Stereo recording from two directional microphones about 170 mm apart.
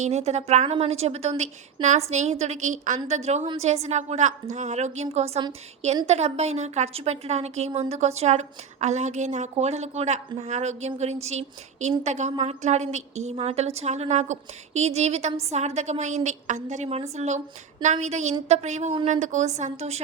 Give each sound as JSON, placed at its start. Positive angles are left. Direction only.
{"t": 0.0, "sound": "a woman's voice", "side_deg": -40}